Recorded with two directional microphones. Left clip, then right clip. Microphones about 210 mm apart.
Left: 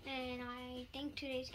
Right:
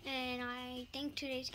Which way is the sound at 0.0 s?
50° right (ahead or behind).